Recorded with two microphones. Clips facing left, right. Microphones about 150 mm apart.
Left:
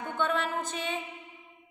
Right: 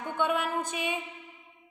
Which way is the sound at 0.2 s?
10° right (ahead or behind).